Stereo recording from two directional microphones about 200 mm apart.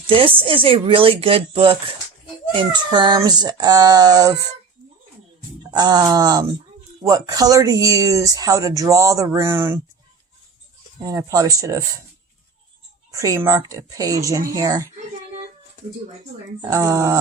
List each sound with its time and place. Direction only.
0.1 s speech: 25° right (ahead or behind)
5.7 s speech: 20° right (ahead or behind)
11.0 s speech: 15° right (ahead or behind)
13.1 s speech: 15° right (ahead or behind)
16.6 s speech: 15° right (ahead or behind)